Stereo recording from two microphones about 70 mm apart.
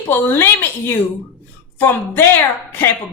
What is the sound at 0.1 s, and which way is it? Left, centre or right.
Speech, left.